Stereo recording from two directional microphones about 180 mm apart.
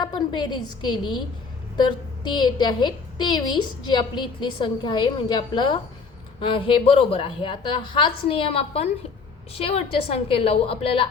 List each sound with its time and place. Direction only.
0.0 s a woman's voice: 25° left (ahead or behind)